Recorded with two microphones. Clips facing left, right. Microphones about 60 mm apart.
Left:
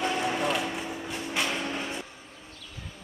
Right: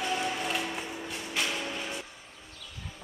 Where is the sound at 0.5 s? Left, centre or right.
Centre.